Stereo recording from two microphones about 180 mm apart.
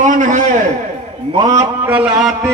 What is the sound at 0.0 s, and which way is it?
Speech, 45° right (ahead or behind).